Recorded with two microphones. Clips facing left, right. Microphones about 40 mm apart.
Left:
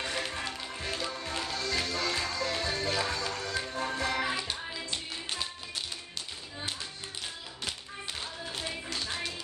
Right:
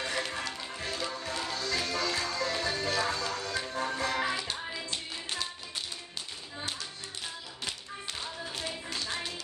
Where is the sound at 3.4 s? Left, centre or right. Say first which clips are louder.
Even; centre.